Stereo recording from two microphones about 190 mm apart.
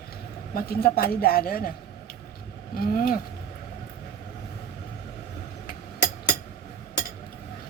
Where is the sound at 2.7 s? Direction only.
50° left (ahead or behind).